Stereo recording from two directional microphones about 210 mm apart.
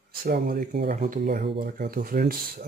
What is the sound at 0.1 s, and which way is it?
Speech, 45° right (ahead or behind).